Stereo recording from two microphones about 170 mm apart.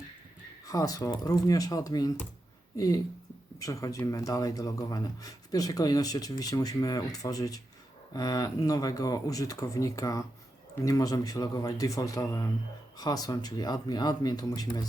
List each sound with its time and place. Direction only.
0.7 s speech: 20° left (ahead or behind)